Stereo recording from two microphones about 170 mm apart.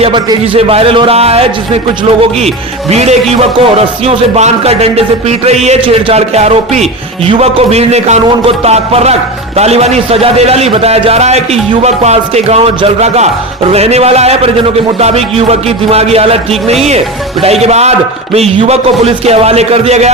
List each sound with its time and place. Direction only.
0.0 s a man's voice: 30° right (ahead or behind)